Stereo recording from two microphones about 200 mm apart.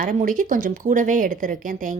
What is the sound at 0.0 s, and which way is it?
Speech, 40° right (ahead or behind).